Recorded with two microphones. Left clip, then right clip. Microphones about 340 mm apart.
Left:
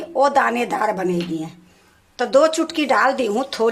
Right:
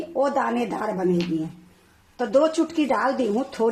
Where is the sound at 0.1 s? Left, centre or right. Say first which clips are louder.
Left 7 dB; left.